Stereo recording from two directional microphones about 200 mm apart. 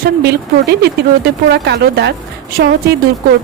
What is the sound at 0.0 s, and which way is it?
Speech, 55° right (ahead or behind).